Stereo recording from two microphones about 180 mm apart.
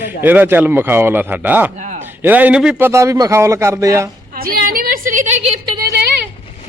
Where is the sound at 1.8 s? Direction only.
45° right (ahead or behind).